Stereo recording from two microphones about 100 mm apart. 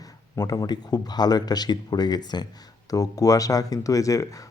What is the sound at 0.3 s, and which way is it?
Speech, 40° left (ahead or behind).